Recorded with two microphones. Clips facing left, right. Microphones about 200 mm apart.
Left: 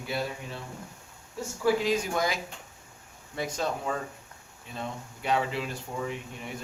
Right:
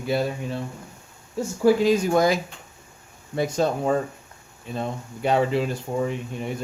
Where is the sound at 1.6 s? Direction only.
40° right (ahead or behind).